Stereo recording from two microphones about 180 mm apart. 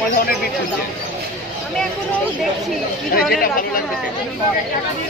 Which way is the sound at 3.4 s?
50° left (ahead or behind).